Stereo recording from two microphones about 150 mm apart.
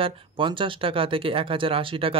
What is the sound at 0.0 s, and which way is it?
Speech, 35° right (ahead or behind).